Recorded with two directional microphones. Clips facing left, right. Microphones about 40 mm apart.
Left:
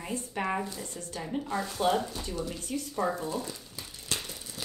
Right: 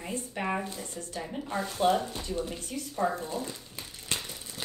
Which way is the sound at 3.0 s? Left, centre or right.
Centre.